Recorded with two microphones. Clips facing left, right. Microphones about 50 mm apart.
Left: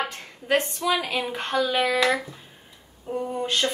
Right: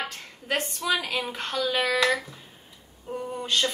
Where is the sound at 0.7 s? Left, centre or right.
Centre.